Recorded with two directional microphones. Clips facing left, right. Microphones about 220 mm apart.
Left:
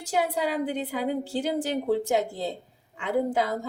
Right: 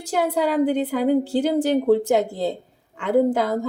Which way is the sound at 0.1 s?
55° right (ahead or behind).